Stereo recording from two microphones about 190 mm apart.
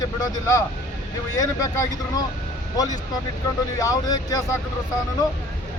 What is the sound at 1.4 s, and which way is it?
Speech, 20° left (ahead or behind).